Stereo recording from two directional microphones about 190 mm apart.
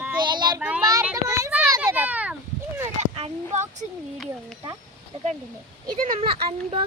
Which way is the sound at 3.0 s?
35° right (ahead or behind).